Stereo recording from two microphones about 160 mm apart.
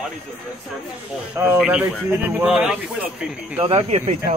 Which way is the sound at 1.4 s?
10° right (ahead or behind).